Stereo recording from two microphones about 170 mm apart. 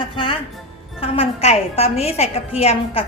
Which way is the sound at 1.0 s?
35° left (ahead or behind).